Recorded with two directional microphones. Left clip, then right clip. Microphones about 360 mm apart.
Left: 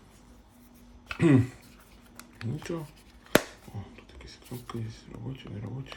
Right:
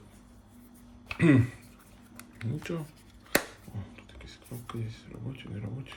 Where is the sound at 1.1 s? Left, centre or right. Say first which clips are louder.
Left 1 dB; centre.